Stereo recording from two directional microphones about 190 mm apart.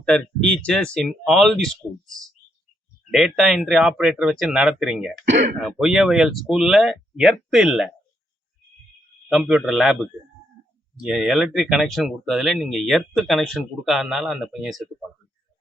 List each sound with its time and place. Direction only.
0.0 s speech: 5° left (ahead or behind)
5.3 s speech: 40° right (ahead or behind)
5.5 s speech: centre (ahead or behind)
9.3 s speech: centre (ahead or behind)